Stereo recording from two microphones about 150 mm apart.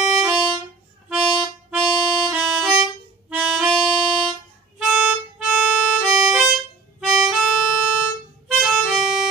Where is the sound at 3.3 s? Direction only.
5° right (ahead or behind).